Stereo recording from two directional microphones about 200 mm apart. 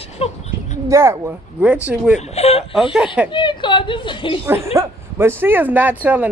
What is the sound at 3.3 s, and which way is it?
A woman's voice, 25° left (ahead or behind).